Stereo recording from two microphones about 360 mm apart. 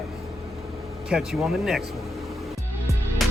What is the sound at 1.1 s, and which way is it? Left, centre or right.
Speech, centre.